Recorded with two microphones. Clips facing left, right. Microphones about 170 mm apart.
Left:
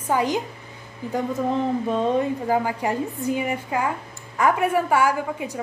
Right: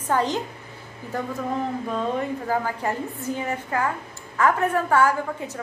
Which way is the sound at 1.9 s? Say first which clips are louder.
Left 4 dB; 20° left (ahead or behind).